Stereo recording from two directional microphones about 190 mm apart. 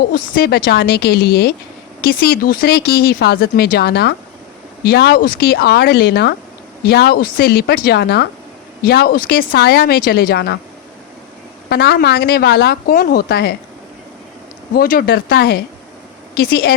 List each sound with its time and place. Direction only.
0.1 s speech: 55° left (ahead or behind)
11.7 s speech: 55° left (ahead or behind)
14.8 s speech: 50° left (ahead or behind)